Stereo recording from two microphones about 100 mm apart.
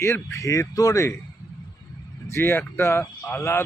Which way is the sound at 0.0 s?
30° left (ahead or behind).